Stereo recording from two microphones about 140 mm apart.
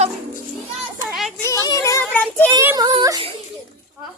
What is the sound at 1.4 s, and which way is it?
Speech, 25° left (ahead or behind).